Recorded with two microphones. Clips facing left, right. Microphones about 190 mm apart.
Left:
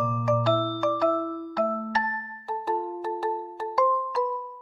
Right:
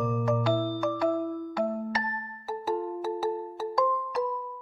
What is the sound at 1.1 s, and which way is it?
Music, 15° right (ahead or behind).